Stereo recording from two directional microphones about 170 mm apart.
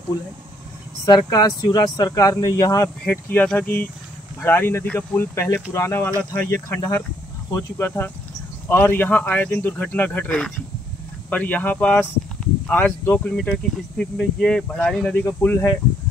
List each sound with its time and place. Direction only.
1.0 s speech: 20° left (ahead or behind)